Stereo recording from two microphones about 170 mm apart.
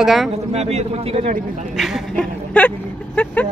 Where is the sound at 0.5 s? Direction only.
35° right (ahead or behind).